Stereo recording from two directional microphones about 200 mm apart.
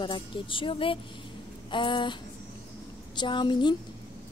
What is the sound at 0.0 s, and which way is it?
Speech, 25° left (ahead or behind).